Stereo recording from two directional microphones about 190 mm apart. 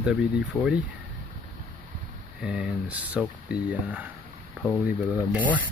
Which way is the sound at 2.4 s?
5° right (ahead or behind).